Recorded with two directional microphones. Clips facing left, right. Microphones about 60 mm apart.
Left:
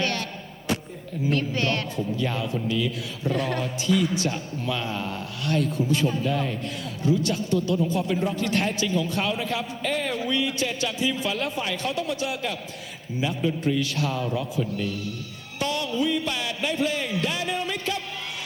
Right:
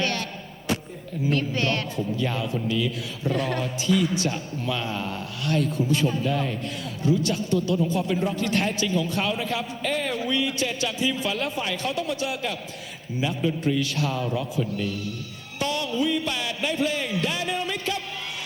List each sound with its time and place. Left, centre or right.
0.0 s music: left
1.3 s a man's voice: left
15.5 s music: left